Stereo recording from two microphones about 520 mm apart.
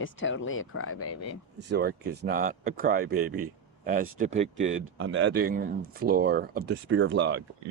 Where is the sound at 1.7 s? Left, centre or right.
Centre.